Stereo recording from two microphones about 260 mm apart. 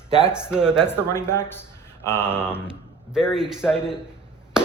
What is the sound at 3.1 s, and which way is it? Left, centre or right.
Speech, centre.